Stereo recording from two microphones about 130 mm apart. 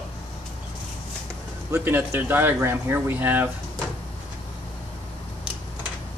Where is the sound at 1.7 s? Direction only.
15° right (ahead or behind).